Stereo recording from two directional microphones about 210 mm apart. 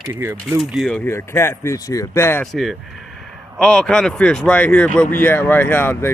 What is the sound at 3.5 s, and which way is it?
Speech, 5° left (ahead or behind).